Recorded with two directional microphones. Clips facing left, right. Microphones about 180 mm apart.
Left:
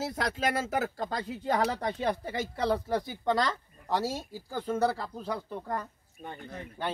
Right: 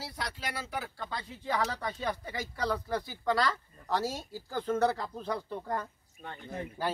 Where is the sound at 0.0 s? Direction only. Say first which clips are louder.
Left 9 dB; 45° left (ahead or behind).